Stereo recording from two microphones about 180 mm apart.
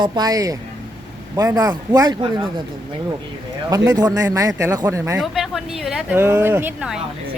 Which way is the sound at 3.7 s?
20° right (ahead or behind).